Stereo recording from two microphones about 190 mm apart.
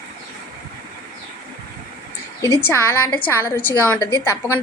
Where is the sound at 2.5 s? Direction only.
15° left (ahead or behind).